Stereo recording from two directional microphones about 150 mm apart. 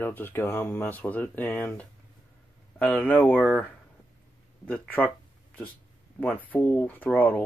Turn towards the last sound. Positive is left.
turn(degrees=10)  # may be behind; listen again after turning